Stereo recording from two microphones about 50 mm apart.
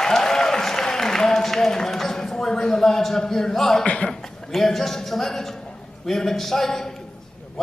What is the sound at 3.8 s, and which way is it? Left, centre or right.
Chuckle, left.